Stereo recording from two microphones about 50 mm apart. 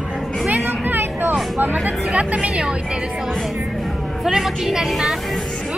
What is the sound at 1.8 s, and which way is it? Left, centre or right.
Speech, right.